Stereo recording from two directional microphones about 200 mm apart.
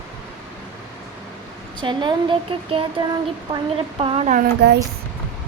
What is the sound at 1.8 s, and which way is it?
Speech, 25° right (ahead or behind).